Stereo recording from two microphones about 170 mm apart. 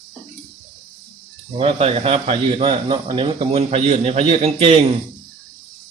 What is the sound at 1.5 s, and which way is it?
Speech, 35° right (ahead or behind).